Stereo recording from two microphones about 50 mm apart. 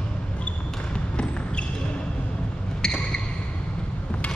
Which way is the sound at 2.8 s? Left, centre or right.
Centre.